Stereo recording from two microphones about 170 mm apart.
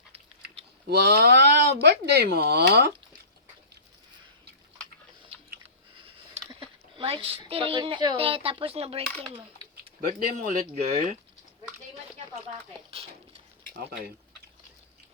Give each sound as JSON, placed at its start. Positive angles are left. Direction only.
{"t": 0.9, "sound": "speech", "side_deg": -70}
{"t": 6.5, "sound": "a woman's voice", "side_deg": -30}
{"t": 10.3, "sound": "speech", "side_deg": -50}
{"t": 12.9, "sound": "speech", "side_deg": -35}